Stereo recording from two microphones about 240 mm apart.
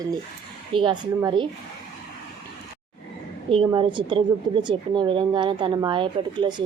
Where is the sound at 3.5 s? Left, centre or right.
Right.